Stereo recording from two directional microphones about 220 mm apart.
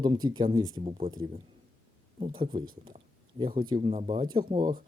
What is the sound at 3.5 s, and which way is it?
A man's voice, 20° right (ahead or behind).